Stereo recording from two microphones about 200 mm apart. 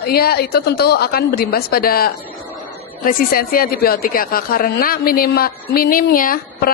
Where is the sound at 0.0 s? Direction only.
50° left (ahead or behind).